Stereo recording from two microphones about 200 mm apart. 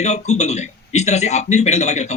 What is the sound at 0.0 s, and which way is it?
A man's voice, 35° left (ahead or behind).